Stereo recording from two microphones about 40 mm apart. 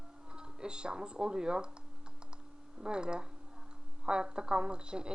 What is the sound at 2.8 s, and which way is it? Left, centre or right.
A woman's voice, right.